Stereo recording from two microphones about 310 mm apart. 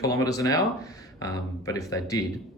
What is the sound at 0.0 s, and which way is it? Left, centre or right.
Speech, centre.